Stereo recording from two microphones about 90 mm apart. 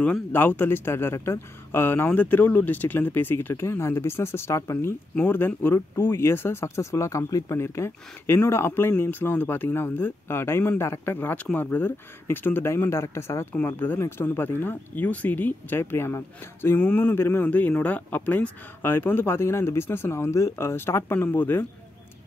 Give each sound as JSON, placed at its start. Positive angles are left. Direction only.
{"t": 0.0, "sound": "speech", "side_deg": 20}
{"t": 5.1, "sound": "speech", "side_deg": 20}